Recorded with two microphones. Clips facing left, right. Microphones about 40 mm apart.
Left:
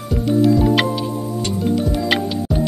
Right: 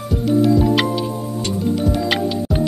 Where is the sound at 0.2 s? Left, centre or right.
Centre.